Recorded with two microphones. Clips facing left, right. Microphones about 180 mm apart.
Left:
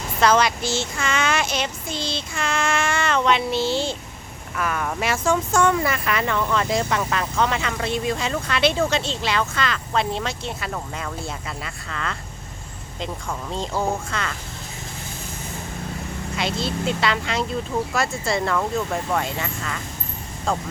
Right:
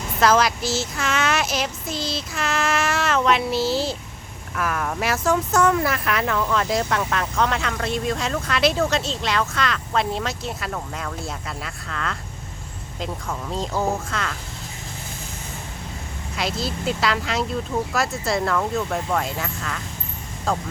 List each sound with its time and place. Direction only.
0.2 s speech: centre (ahead or behind)
16.3 s speech: centre (ahead or behind)